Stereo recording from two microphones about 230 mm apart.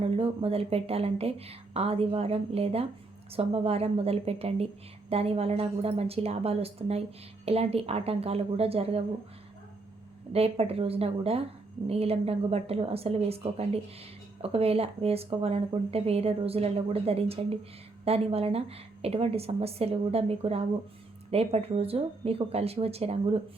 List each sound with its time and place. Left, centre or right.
0.0 s a woman's voice: right
10.3 s a woman's voice: right